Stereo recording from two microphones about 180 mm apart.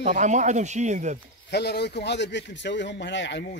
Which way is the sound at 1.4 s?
65° left (ahead or behind).